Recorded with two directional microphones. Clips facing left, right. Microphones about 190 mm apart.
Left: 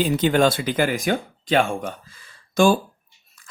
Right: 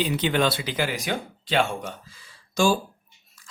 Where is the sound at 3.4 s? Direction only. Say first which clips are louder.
Left 1 dB; 55° left (ahead or behind).